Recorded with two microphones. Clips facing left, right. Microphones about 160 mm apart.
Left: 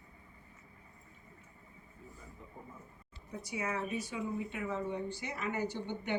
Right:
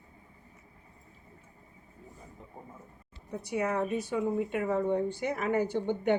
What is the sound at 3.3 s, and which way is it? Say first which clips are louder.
Speech: right 7 dB; 65° right (ahead or behind).